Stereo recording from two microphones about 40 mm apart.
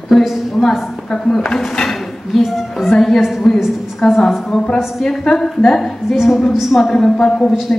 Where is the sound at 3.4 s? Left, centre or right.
Centre.